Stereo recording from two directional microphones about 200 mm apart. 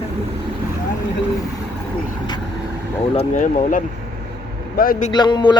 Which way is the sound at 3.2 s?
40° left (ahead or behind).